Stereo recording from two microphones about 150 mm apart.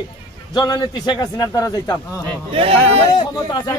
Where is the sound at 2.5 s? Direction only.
40° right (ahead or behind).